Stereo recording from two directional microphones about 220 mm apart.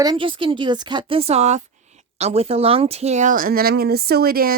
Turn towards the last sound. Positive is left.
turn(degrees=-45)  # may be behind; listen again after turning